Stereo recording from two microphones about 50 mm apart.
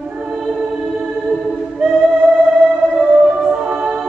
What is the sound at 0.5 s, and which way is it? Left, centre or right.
Music, centre.